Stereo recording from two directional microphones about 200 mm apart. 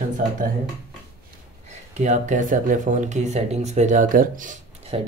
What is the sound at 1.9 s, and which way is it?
Speech, 35° right (ahead or behind).